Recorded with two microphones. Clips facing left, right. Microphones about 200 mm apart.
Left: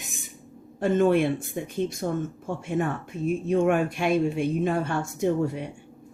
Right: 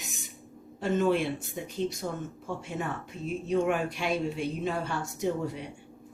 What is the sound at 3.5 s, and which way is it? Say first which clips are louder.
Speech: left 4 dB; 55° left (ahead or behind).